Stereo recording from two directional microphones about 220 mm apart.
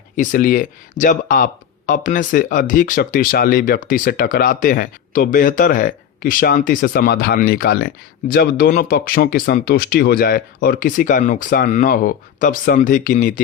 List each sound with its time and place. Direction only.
0.2 s speech: 40° left (ahead or behind)